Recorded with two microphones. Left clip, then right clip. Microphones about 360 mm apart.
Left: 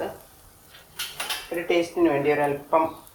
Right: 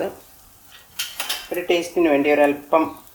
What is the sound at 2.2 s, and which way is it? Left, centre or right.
Speech, right.